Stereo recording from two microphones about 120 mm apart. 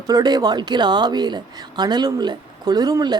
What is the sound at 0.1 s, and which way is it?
A woman's voice, 35° right (ahead or behind).